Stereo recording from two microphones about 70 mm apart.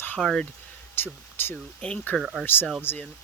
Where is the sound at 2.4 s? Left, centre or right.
Left.